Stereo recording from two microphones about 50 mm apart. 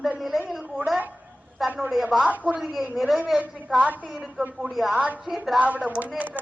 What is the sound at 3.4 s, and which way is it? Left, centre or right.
Speech, right.